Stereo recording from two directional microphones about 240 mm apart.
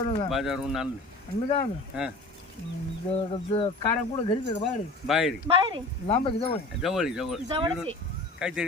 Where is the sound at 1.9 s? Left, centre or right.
Centre.